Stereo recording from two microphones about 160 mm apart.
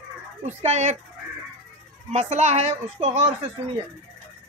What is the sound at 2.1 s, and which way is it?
Speech, 45° right (ahead or behind).